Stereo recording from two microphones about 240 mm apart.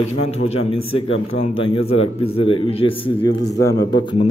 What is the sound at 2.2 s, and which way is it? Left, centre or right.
Speech, left.